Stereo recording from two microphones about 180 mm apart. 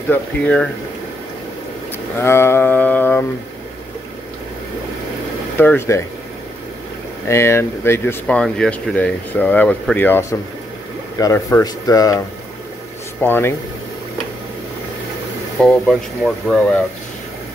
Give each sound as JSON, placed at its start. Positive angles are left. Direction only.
{"t": 0.1, "sound": "speech", "side_deg": 5}
{"t": 2.1, "sound": "speech", "side_deg": 15}
{"t": 5.6, "sound": "speech", "side_deg": 10}
{"t": 7.2, "sound": "speech", "side_deg": 15}
{"t": 13.2, "sound": "speech", "side_deg": 10}
{"t": 15.6, "sound": "speech", "side_deg": 5}